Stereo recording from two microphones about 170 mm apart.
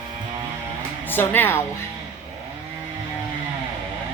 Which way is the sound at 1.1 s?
10° left (ahead or behind).